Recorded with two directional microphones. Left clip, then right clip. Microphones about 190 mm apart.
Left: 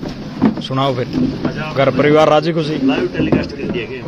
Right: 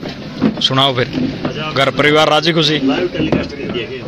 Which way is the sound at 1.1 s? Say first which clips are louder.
Left 1 dB; 55° left (ahead or behind).